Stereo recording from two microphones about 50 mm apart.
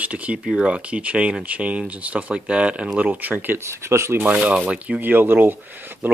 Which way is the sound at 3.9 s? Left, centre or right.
Right.